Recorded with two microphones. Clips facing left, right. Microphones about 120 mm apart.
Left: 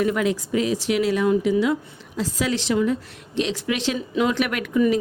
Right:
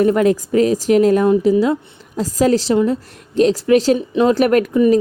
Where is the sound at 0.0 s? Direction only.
45° right (ahead or behind).